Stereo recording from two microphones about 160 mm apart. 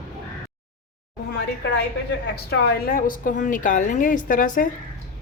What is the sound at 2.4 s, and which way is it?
A woman's voice, 75° left (ahead or behind).